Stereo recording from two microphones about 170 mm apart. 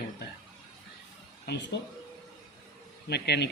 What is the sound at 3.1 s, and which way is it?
Speech, 75° left (ahead or behind).